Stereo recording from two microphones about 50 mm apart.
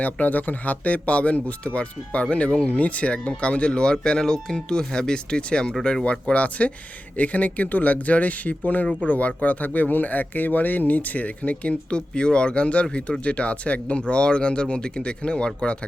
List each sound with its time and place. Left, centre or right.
0.0 s speech: left